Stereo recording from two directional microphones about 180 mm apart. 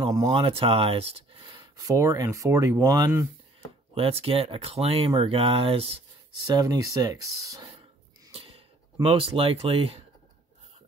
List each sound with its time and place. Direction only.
0.0 s speech: 20° right (ahead or behind)
0.3 s speech: 30° right (ahead or behind)
3.9 s speech: 30° right (ahead or behind)
6.4 s speech: 20° right (ahead or behind)
8.3 s a sound: 30° right (ahead or behind)
9.0 s speech: 30° right (ahead or behind)